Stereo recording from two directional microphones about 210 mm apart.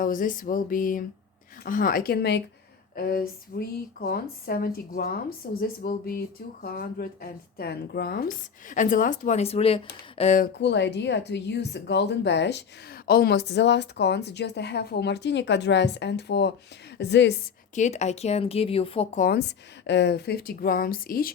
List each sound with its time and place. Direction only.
0.0 s speech: 40° left (ahead or behind)
10.6 s a woman's voice: 55° left (ahead or behind)
17.7 s speech: 35° left (ahead or behind)
19.2 s speech: 50° left (ahead or behind)